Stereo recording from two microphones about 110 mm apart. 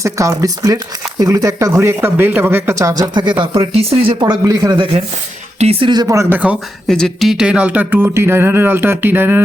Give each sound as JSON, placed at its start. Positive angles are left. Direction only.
{"t": 0.0, "sound": "speech", "side_deg": -30}
{"t": 4.2, "sound": "speech", "side_deg": -35}
{"t": 4.8, "sound": "speech", "side_deg": -65}
{"t": 5.8, "sound": "speech", "side_deg": -40}
{"t": 6.3, "sound": "speech", "side_deg": -15}
{"t": 6.8, "sound": "speech", "side_deg": 5}